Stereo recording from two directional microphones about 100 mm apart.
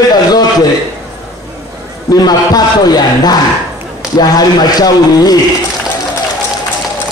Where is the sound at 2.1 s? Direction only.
40° left (ahead or behind).